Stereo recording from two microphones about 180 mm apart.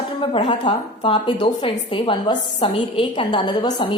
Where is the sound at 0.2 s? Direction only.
25° left (ahead or behind).